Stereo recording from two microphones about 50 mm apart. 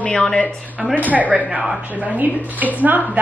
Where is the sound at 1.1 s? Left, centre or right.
Right.